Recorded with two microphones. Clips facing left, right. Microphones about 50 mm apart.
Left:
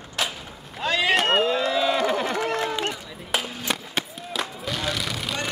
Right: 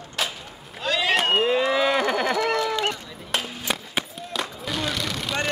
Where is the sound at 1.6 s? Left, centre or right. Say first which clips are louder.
Right 1 dB; right.